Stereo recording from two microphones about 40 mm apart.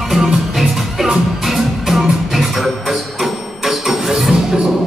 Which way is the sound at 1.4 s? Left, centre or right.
Centre.